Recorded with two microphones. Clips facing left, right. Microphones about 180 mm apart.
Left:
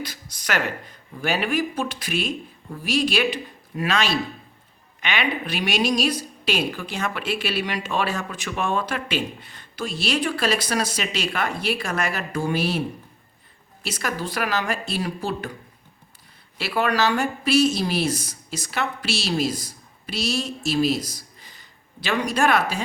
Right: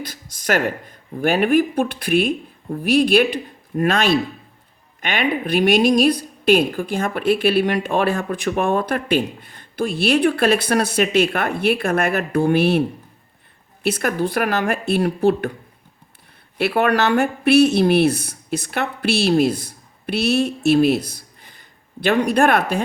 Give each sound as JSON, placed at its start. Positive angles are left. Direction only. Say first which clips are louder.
{"t": 0.0, "sound": "a woman's voice", "louder": "right 4 dB", "side_deg": -50}
{"t": 13.8, "sound": "speech", "louder": "right 8 dB", "side_deg": -55}
{"t": 16.6, "sound": "speech", "louder": "right 5 dB", "side_deg": -60}